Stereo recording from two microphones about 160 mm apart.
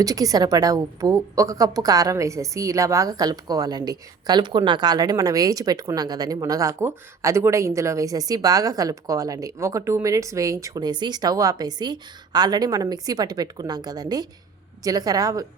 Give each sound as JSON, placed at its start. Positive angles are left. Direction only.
{"t": 0.0, "sound": "a woman's voice", "side_deg": -20}